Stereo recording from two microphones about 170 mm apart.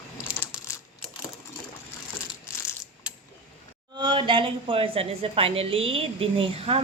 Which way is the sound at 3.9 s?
25° right (ahead or behind).